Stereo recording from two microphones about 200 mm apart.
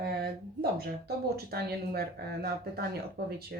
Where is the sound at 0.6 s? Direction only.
50° right (ahead or behind).